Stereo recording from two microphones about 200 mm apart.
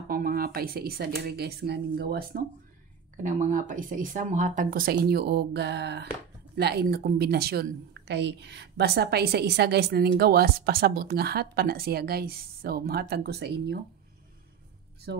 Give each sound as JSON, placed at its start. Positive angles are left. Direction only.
{"t": 0.1, "sound": "a woman's voice", "side_deg": -45}
{"t": 3.2, "sound": "a woman's voice", "side_deg": -40}
{"t": 15.1, "sound": "speech", "side_deg": -55}